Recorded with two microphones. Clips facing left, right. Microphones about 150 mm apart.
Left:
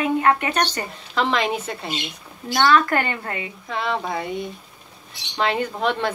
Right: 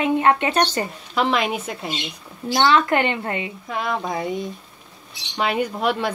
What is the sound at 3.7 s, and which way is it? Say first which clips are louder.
Speech: even; 10° right (ahead or behind).